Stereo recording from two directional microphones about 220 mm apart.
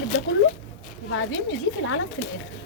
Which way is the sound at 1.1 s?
60° left (ahead or behind).